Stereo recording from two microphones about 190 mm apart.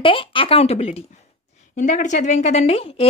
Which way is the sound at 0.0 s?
25° left (ahead or behind).